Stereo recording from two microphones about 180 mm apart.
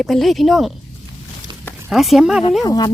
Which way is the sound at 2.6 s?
20° left (ahead or behind).